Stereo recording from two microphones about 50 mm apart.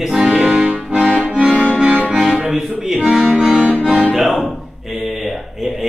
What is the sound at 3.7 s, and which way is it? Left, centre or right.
Music, right.